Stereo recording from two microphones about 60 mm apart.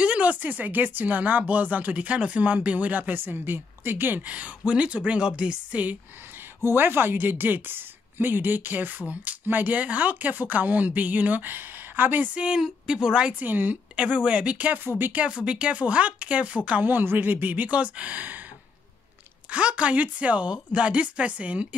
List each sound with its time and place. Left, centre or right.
0.0 s speech: right
6.6 s speech: right
12.4 s a woman's voice: centre
13.4 s speech: right
13.9 s speech: centre
19.5 s speech: right